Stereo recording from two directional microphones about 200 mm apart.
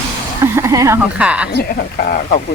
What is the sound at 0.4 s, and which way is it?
Speech, 15° right (ahead or behind).